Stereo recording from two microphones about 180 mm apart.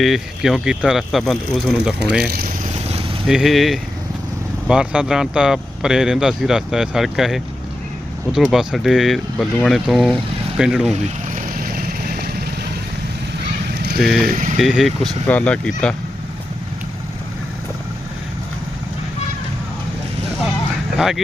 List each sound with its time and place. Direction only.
0.0 s speech: centre (ahead or behind)
2.3 s vehicle: 50° right (ahead or behind)
2.7 s vehicle: 35° right (ahead or behind)
3.2 s speech: centre (ahead or behind)
10.9 s vehicle: 45° right (ahead or behind)
13.8 s a sound: 60° right (ahead or behind)
14.3 s speech: 45° right (ahead or behind)
14.6 s speech: centre (ahead or behind)
20.9 s speech: centre (ahead or behind)